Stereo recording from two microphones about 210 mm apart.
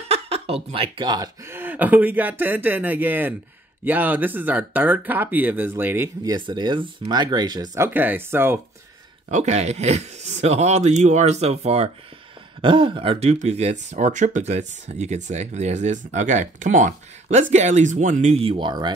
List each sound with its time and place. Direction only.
0.1 s a sound: 30° right (ahead or behind)
0.7 s speech: 25° right (ahead or behind); by 6.3 s 10° right (ahead or behind)
6.3 s speech: 20° right (ahead or behind)
9.3 s speech: 30° right (ahead or behind)